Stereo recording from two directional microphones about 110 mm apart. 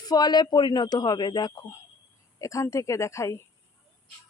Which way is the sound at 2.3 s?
30° left (ahead or behind).